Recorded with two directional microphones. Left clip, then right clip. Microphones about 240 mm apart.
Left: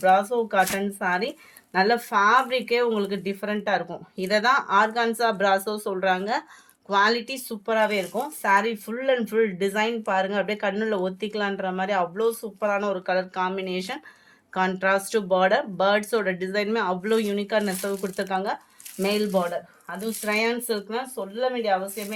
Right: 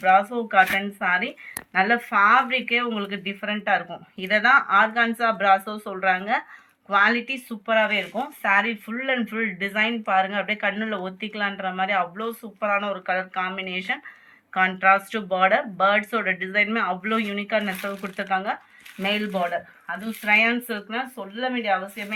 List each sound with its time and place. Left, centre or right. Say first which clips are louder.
0.0 s speech: right 1 dB; left
5.6 s speech: left 4 dB; left
6.0 s speech: right 3 dB; left
20.2 s speech: right 5 dB; left